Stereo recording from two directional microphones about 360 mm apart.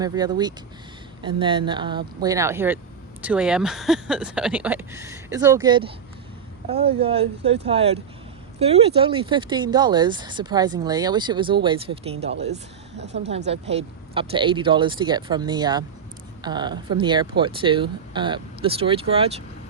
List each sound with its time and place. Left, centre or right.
0.0 s speech: centre
13.5 s speech: centre